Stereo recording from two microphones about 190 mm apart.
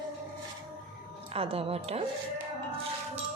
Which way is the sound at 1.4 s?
30° right (ahead or behind).